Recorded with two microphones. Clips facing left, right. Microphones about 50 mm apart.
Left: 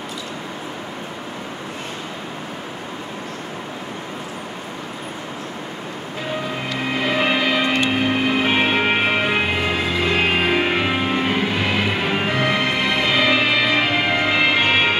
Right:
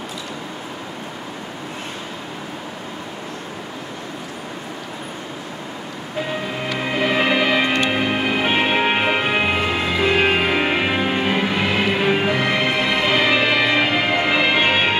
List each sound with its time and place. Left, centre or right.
7.1 s music: centre
7.3 s music: centre